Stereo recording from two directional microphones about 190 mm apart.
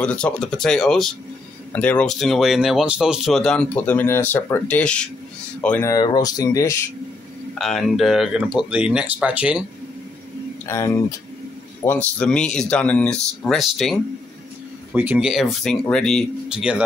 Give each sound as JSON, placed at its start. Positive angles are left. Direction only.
{"t": 0.0, "sound": "speech", "side_deg": 5}
{"t": 7.5, "sound": "speech", "side_deg": 0}
{"t": 10.7, "sound": "speech", "side_deg": 15}